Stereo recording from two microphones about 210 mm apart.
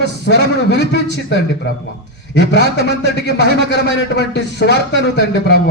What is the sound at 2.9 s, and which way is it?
A man's voice, 55° left (ahead or behind).